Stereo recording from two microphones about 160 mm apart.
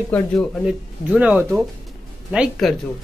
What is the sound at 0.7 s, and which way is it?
Speech, 5° right (ahead or behind).